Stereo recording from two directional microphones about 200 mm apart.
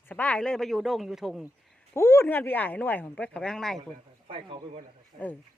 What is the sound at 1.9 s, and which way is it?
Speech, 15° left (ahead or behind).